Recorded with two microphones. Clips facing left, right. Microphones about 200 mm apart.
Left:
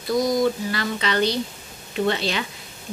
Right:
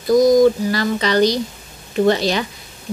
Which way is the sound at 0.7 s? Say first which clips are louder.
Right 6 dB; 40° right (ahead or behind).